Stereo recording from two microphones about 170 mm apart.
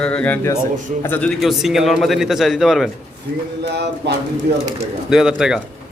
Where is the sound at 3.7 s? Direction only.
85° right.